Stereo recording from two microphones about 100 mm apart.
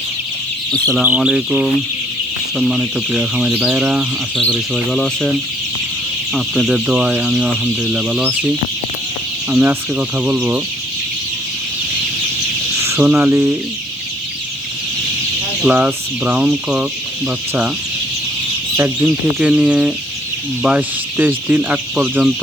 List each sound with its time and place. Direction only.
1.0 s speech: 10° right (ahead or behind)
4.5 s speech: 5° left (ahead or behind)
6.3 s speech: 5° right (ahead or behind)
9.5 s speech: 15° right (ahead or behind)
12.8 s a sound: 25° right (ahead or behind)
15.6 s speech: 15° right (ahead or behind)
18.8 s speech: 15° right (ahead or behind)